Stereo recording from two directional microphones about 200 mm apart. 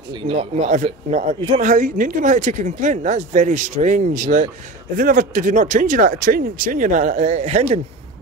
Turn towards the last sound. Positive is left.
turn(degrees=-35)  # may be behind; listen again after turning